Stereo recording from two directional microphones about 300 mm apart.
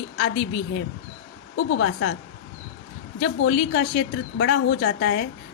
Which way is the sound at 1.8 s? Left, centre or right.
Left.